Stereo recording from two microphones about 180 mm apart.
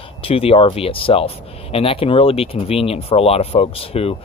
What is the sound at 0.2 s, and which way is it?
Speech, 30° left (ahead or behind).